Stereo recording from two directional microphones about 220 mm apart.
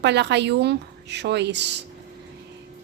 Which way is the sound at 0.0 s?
50° right (ahead or behind).